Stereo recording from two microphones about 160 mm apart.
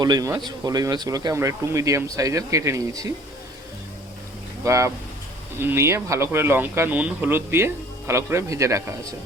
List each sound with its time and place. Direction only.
0.0 s speech: 25° right (ahead or behind)
4.6 s speech: 20° right (ahead or behind)